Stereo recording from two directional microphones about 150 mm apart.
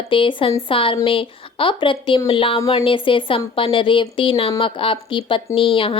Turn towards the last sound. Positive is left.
turn(degrees=35)  # may be behind; listen again after turning